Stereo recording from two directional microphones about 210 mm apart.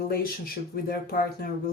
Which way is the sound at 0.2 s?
45° left (ahead or behind).